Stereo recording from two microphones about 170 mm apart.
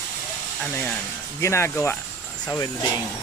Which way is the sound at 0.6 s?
5° left (ahead or behind).